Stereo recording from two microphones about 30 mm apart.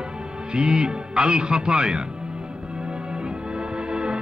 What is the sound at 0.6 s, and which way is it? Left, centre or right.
Speech, right.